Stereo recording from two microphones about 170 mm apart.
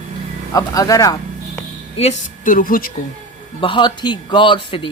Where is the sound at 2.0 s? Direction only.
45° left (ahead or behind).